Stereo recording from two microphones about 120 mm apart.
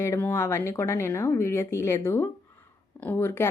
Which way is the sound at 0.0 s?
20° left (ahead or behind).